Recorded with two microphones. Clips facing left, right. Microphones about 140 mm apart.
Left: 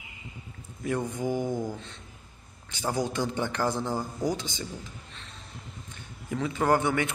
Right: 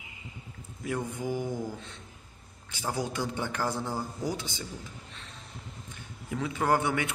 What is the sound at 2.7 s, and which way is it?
A man's voice, 5° right (ahead or behind).